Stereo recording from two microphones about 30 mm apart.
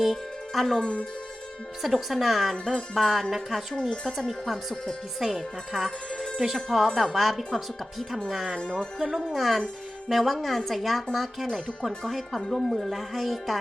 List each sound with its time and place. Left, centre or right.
0.0 s speech: centre
1.8 s speech: centre
3.8 s speech: centre
4.3 s speech: centre
5.2 s speech: centre